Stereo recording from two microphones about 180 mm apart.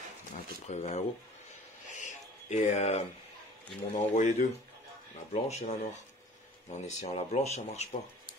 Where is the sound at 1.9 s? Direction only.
40° left (ahead or behind).